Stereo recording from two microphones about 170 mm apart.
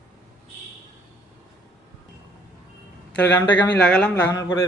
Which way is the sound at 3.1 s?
10° left (ahead or behind).